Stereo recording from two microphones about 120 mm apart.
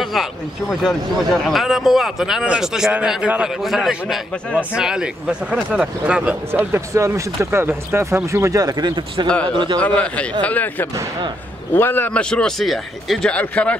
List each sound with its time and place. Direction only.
0.0 s a man's voice: centre (ahead or behind); by 9.8 s 40° right (ahead or behind)
9.8 s a man's voice: 10° left (ahead or behind)